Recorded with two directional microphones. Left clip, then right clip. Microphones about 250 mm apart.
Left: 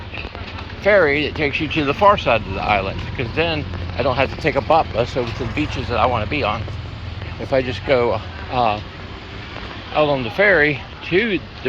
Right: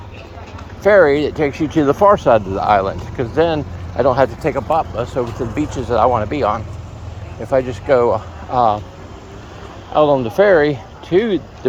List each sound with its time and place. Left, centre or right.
0.8 s speech: right
1.5 s speech: right
1.7 s speech: right
4.4 s speech: centre
5.4 s speech: right
9.9 s speech: right
10.3 s speech: right